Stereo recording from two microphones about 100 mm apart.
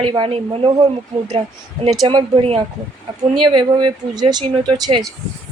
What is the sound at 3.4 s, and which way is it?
Speech, 50° right (ahead or behind).